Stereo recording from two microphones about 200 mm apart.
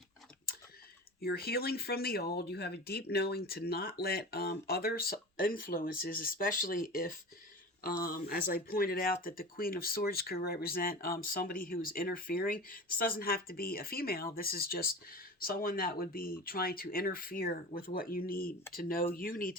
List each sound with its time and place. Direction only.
1.2 s speech: 50° left (ahead or behind)